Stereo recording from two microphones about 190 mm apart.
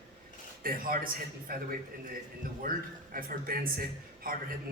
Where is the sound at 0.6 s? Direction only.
50° right (ahead or behind).